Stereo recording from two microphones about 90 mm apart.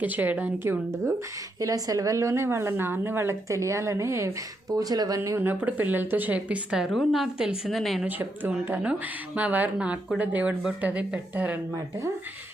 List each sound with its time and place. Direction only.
0.0 s speech: 20° right (ahead or behind)
1.5 s a woman's voice: 40° right (ahead or behind)
4.7 s speech: 45° right (ahead or behind)
5.4 s a woman's voice: 20° right (ahead or behind); by 8.0 s centre (ahead or behind)
8.0 s a woman's voice: 20° right (ahead or behind)
11.7 s a woman's voice: 35° right (ahead or behind)